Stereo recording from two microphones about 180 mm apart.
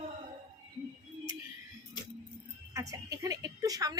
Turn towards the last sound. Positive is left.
turn(degrees=-20)  # may be behind; listen again after turning